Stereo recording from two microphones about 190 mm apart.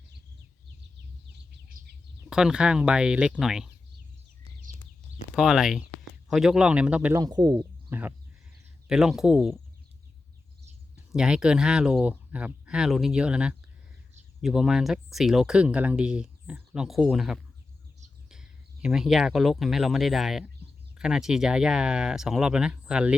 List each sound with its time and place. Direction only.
0.9 s bird: 60° right (ahead or behind)
2.3 s speech: 5° right (ahead or behind)
5.3 s speech: 5° right (ahead or behind)
7.2 s speech: 20° right (ahead or behind)
7.9 s speech: 10° right (ahead or behind)
10.9 s speech: 5° right (ahead or behind)